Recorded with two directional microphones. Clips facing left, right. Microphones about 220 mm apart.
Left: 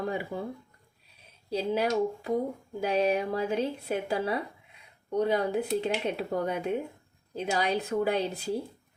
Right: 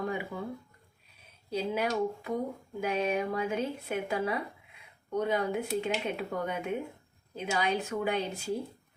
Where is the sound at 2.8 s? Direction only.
35° left (ahead or behind).